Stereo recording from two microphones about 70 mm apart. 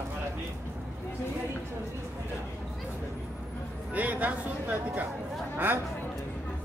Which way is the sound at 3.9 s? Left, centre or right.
Right.